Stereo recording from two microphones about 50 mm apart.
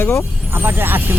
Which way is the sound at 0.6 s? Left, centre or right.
Right.